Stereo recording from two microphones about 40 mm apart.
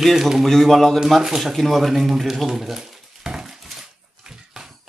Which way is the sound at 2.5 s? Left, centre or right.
Centre.